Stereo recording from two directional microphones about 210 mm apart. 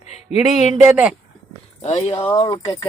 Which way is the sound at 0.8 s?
5° right (ahead or behind).